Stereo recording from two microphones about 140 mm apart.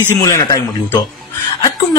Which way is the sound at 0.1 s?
25° left (ahead or behind).